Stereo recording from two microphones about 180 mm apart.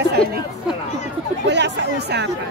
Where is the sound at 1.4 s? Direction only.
70° right (ahead or behind).